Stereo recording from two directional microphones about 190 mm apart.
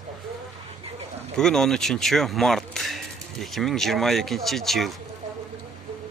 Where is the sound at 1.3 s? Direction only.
Centre (ahead or behind).